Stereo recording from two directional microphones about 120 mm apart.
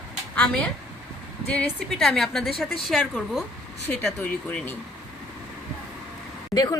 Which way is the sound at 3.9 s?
10° left (ahead or behind).